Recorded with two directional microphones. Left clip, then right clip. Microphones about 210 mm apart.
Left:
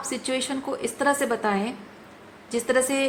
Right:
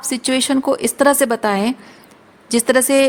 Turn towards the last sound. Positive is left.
turn(degrees=-60)  # may be behind; listen again after turning